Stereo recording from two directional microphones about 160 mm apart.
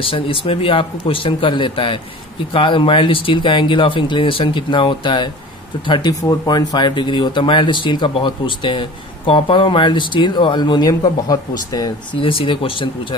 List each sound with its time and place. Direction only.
0.0 s speech: 35° left (ahead or behind)